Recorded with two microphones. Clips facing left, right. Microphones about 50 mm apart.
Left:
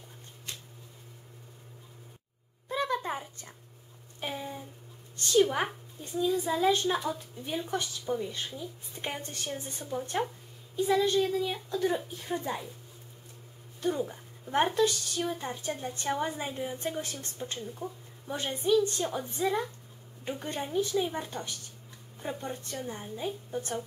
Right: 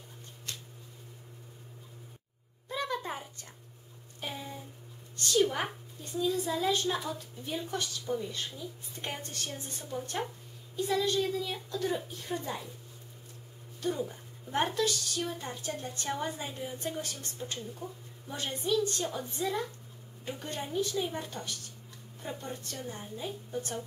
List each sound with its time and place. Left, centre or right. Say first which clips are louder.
2.7 s a sound: left 4 dB; centre
5.4 s a woman's voice: left 3 dB; centre
13.8 s a woman's voice: left 3 dB; centre